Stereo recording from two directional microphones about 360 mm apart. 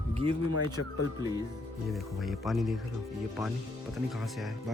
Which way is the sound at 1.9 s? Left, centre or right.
Centre.